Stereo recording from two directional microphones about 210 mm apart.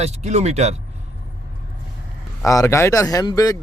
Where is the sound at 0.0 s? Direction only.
30° right (ahead or behind).